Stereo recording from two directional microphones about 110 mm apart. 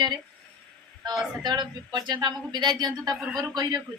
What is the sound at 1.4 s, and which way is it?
Speech, 40° right (ahead or behind).